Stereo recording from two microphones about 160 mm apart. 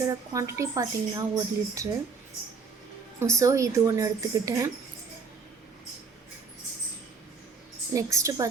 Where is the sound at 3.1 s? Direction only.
20° right (ahead or behind).